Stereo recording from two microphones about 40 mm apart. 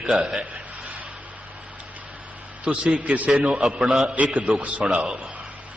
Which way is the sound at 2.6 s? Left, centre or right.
Right.